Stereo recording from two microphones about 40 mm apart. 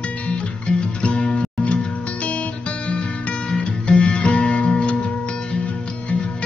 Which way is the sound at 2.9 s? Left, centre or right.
Left.